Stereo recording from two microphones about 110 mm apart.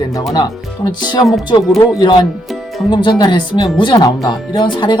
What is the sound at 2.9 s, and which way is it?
Speech, 45° left (ahead or behind).